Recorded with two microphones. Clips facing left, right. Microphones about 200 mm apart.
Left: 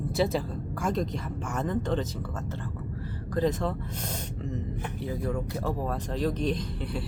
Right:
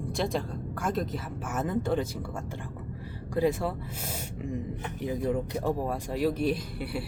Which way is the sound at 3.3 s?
10° right (ahead or behind).